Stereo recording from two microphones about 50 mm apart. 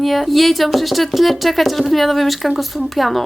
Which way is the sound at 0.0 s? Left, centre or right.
Centre.